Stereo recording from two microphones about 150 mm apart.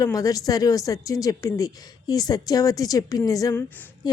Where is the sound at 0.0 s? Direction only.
25° left (ahead or behind).